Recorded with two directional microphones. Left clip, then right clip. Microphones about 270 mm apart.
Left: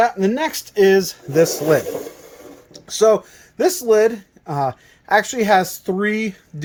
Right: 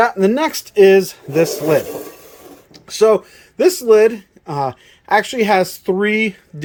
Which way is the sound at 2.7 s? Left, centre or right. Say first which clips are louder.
Right 3 dB; centre.